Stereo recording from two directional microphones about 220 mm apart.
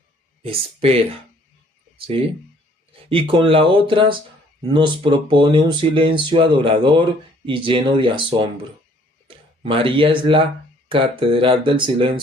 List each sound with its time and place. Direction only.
0.4 s speech: 25° right (ahead or behind)